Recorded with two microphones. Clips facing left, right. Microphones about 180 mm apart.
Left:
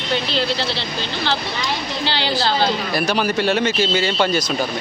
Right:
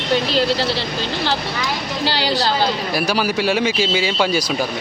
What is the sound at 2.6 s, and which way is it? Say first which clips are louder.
A man's voice: even; 5° right (ahead or behind).